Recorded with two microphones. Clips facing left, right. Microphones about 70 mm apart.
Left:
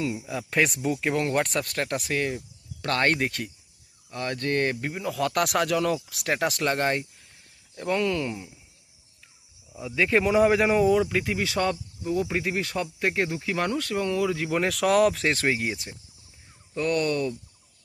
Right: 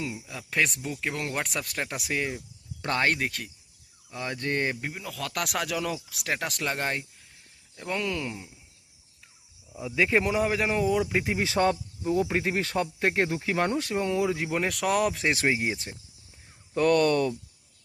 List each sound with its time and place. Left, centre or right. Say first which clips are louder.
0.2 s speech: even; centre
4.9 s speech: left 8 dB; centre
9.7 s speech: left 1 dB; centre
10.3 s speech: left 6 dB; centre
11.1 s speech: even; right
14.4 s speech: left 3 dB; centre
16.7 s speech: right 3 dB; right